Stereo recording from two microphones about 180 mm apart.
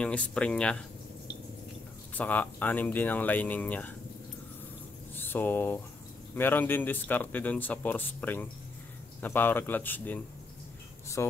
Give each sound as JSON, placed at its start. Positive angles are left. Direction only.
{"t": 0.0, "sound": "speech", "side_deg": 5}
{"t": 2.1, "sound": "speech", "side_deg": 10}
{"t": 5.2, "sound": "speech", "side_deg": 10}